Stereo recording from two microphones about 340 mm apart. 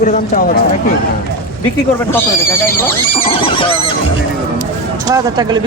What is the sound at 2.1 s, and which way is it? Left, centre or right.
Speech, centre.